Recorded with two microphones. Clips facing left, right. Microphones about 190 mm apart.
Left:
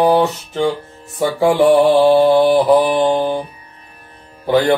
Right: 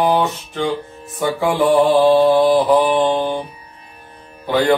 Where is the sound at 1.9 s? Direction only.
10° left (ahead or behind).